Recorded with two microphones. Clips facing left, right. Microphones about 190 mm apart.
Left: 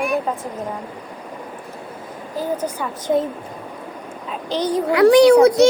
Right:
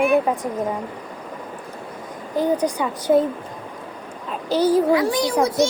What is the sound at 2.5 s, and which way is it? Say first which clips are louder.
Speech: right 3 dB; 15° right (ahead or behind).